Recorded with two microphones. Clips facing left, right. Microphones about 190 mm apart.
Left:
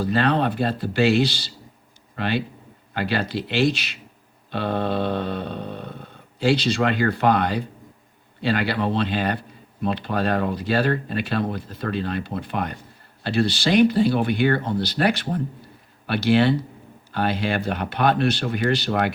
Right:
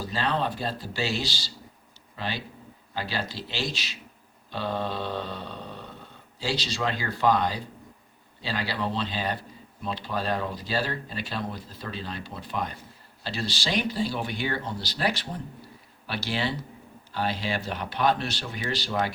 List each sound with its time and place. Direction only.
0.0 s mantra: 60° left (ahead or behind)
2.1 s speech: 60° left (ahead or behind)
2.9 s mantra: 60° left (ahead or behind)